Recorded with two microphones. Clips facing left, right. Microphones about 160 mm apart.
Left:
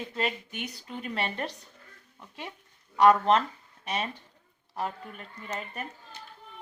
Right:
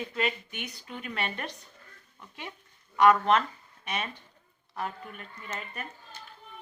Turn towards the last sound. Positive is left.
turn(degrees=35)  # may be behind; listen again after turning